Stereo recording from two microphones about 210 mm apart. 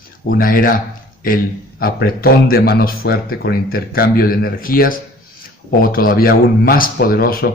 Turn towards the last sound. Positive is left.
turn(degrees=45)  # may be behind; listen again after turning